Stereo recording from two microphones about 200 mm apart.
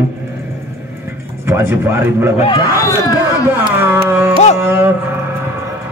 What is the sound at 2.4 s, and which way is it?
Speech, 20° left (ahead or behind).